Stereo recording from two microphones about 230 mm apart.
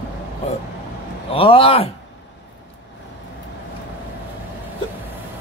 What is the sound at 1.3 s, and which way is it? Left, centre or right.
Speech, left.